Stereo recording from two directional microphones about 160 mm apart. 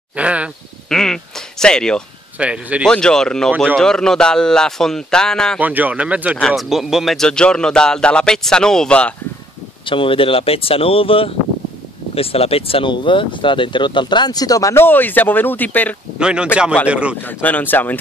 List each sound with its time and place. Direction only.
0.1 s speech: 10° right (ahead or behind)
0.8 s speech: 5° left (ahead or behind)
2.3 s speech: 10° right (ahead or behind)
2.9 s a man's voice: 5° left (ahead or behind)
5.6 s speech: 10° right (ahead or behind)
6.3 s a man's voice: centre (ahead or behind)
9.8 s speech: 35° left (ahead or behind); by 16.0 s 10° left (ahead or behind)
16.2 s a man's voice: 5° right (ahead or behind)
17.2 s speech: 10° left (ahead or behind)